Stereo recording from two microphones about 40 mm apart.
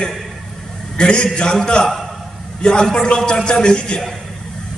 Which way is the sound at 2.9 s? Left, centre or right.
Centre.